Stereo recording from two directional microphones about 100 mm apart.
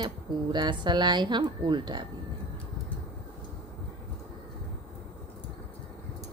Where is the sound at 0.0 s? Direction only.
45° right (ahead or behind).